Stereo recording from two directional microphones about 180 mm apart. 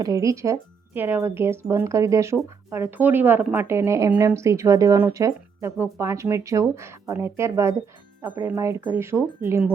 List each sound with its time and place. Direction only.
0.0 s speech: 20° right (ahead or behind)